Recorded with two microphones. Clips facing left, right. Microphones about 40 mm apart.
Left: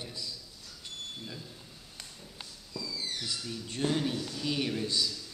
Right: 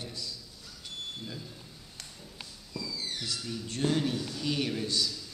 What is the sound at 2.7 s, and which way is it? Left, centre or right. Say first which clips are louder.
Music: right 1 dB; right.